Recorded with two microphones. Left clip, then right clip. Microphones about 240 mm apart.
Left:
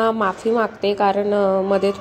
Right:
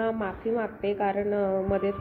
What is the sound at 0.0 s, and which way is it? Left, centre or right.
A woman's voice, left.